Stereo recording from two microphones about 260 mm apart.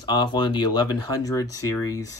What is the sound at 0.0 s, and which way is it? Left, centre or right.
Speech, centre.